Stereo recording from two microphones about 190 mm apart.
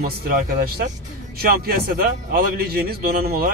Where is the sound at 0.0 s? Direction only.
50° right (ahead or behind).